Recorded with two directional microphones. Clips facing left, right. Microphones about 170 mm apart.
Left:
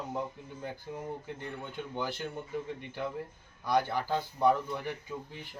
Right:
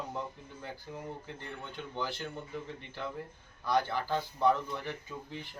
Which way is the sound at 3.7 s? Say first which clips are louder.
Left 1 dB; 10° left (ahead or behind).